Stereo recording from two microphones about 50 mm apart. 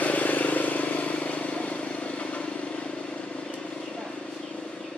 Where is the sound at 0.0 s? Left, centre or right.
Left.